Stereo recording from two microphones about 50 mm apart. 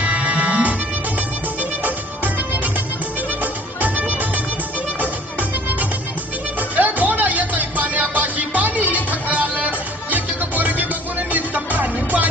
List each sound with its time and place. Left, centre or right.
0.0 s music: right
6.7 s music: right